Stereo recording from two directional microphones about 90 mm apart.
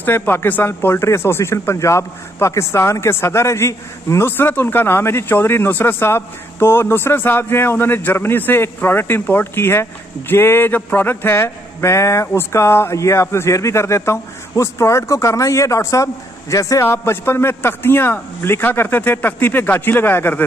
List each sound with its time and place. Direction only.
0.0 s speech: 20° left (ahead or behind); by 16.8 s 40° left (ahead or behind)
16.8 s speech: 25° left (ahead or behind)